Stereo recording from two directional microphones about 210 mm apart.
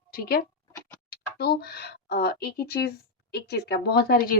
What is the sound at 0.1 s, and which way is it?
A woman's voice, 45° left (ahead or behind).